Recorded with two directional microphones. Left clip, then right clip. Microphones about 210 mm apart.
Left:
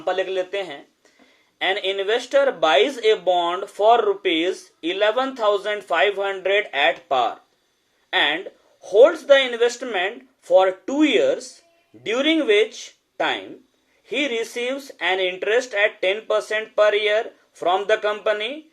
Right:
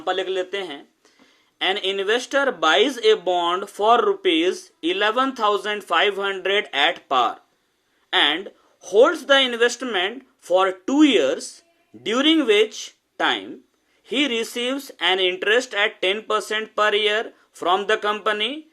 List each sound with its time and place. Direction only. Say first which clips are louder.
0.0 s speech: left 1 dB; 40° right (ahead or behind)